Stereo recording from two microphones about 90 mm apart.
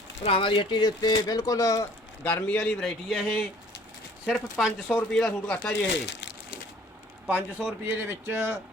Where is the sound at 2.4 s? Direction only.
10° left (ahead or behind).